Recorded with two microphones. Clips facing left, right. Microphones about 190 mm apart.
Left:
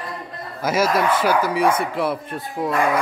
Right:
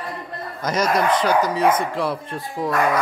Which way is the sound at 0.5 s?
5° left (ahead or behind).